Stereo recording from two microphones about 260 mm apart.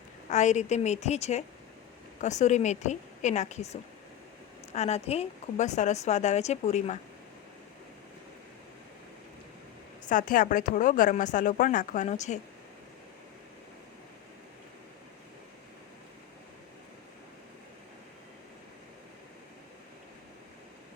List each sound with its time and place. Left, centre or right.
0.3 s speech: left
10.1 s speech: left